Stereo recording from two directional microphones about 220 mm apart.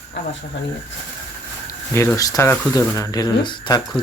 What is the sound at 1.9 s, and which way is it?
Speech, 10° left (ahead or behind).